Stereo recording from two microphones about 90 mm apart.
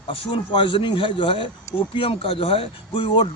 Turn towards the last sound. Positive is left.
turn(degrees=70)  # may be behind; listen again after turning